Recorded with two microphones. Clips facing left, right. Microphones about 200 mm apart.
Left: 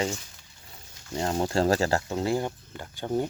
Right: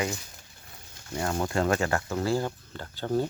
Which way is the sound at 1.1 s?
25° left (ahead or behind).